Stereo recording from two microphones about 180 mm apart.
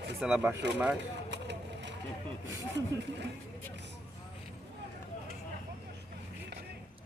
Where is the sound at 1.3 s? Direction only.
75° right (ahead or behind).